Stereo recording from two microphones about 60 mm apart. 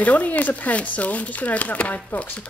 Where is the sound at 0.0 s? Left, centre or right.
Left.